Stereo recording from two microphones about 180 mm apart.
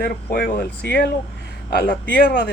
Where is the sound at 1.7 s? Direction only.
55° left (ahead or behind).